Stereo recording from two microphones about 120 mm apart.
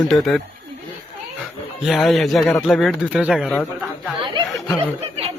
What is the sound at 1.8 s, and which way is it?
Speech, centre (ahead or behind).